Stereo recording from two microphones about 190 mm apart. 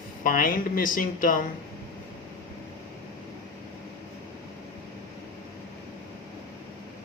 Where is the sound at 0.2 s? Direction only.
45° left (ahead or behind).